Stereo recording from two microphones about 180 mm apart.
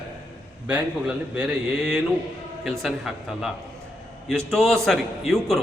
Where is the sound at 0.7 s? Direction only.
5° right (ahead or behind).